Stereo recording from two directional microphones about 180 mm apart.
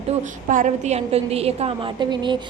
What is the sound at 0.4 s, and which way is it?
A woman's voice, 45° right (ahead or behind).